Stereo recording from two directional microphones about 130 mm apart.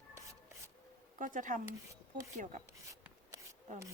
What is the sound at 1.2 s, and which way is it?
Speech, 85° right.